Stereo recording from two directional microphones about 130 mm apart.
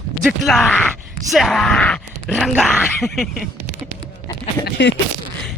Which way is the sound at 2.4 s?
Centre (ahead or behind).